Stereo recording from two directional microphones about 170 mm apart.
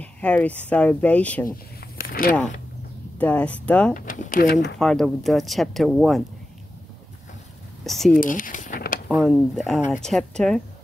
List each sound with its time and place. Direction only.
0.0 s speech: 10° left (ahead or behind)
2.0 s a sound: 60° left (ahead or behind)
3.2 s speech: 10° left (ahead or behind)
3.9 s speech: 50° left (ahead or behind)
4.7 s speech: 5° left (ahead or behind)
7.8 s speech: centre (ahead or behind)
8.2 s speech: 50° left (ahead or behind)
9.2 s speech: centre (ahead or behind)